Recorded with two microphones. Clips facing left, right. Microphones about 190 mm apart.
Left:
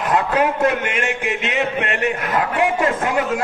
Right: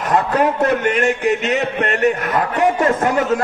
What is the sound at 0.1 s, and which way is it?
A man's voice, 40° right (ahead or behind).